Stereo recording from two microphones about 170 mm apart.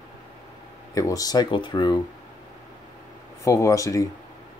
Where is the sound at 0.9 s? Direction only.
20° left (ahead or behind).